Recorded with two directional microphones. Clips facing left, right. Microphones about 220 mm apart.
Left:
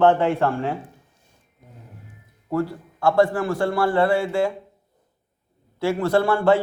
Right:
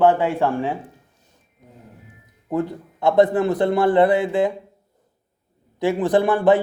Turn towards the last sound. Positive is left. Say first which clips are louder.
# right 2 dB
turn(degrees=-15)  # may be behind; listen again after turning